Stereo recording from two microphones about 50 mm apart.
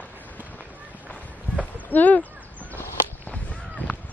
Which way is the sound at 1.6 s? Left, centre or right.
Left.